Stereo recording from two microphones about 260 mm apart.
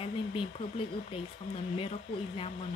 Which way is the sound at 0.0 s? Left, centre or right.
Left.